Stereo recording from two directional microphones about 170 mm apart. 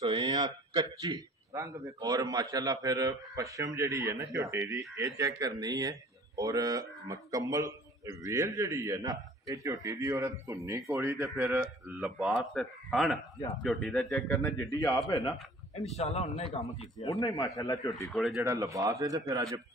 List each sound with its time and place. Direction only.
0.0 s a man's voice: 25° right (ahead or behind); by 15.3 s 20° left (ahead or behind)
16.0 s a man's voice: 40° left (ahead or behind)
17.1 s a man's voice: 20° left (ahead or behind)
18.1 s speech: centre (ahead or behind)
18.4 s a man's voice: 20° right (ahead or behind)